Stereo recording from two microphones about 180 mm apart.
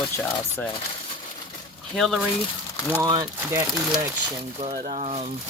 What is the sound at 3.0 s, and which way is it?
Speech, 20° right (ahead or behind).